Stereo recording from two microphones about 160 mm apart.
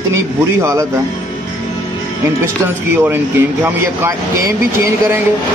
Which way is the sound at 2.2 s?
15° right (ahead or behind).